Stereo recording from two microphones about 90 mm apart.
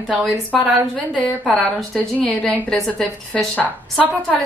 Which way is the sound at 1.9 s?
15° left (ahead or behind).